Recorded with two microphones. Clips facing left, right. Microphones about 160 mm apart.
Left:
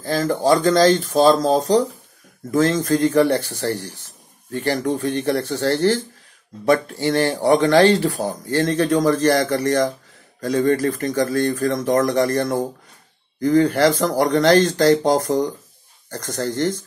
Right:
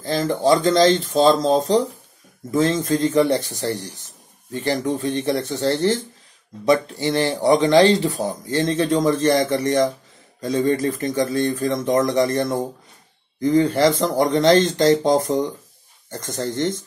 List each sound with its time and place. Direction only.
0.0 s a man's voice: 20° right (ahead or behind)